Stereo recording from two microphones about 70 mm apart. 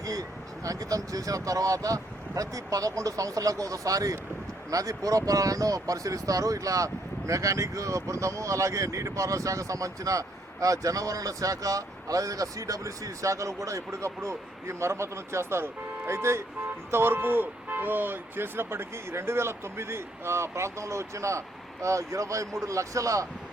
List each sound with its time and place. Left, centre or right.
0.0 s speech: right